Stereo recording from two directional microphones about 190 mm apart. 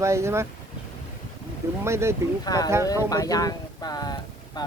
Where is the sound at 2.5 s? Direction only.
20° left (ahead or behind).